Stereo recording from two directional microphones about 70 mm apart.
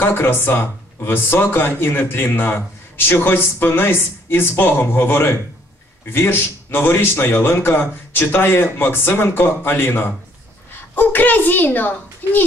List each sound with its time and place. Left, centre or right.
0.0 s a child's voice: left